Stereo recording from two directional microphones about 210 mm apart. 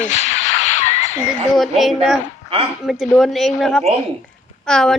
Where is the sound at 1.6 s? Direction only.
Centre (ahead or behind).